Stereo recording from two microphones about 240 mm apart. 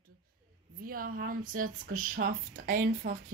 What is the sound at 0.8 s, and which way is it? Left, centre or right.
Speech, right.